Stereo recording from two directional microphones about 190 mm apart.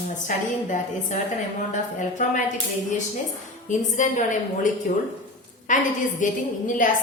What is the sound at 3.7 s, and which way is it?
A woman's voice, 40° left (ahead or behind).